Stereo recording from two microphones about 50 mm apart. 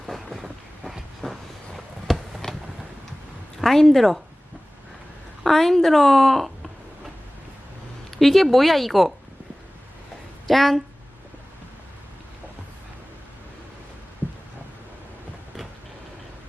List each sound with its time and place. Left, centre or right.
0.0 s vehicle: centre
3.6 s a woman's voice: centre
5.4 s a woman's voice: centre
8.2 s a woman's voice: centre
10.4 s a woman's voice: centre
14.2 s a sound: right